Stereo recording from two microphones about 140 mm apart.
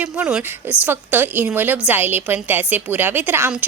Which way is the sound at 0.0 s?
5° right (ahead or behind).